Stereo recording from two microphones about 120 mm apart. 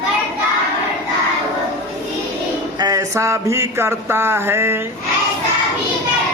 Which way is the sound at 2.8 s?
30° right (ahead or behind).